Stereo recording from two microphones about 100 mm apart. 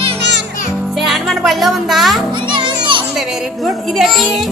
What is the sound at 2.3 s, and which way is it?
Children playing, 55° right (ahead or behind).